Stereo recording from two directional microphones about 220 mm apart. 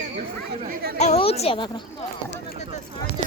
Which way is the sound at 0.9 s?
30° left (ahead or behind).